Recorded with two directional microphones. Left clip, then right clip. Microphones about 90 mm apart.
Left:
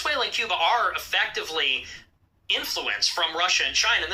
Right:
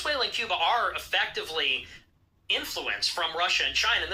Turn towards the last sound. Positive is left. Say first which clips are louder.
# left 3 dB
turn(degrees=25)  # may be behind; listen again after turning